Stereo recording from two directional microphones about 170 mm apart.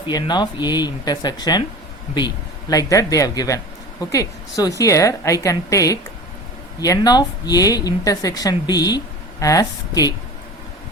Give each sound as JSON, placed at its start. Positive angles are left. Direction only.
{"t": 0.1, "sound": "a woman's voice", "side_deg": 25}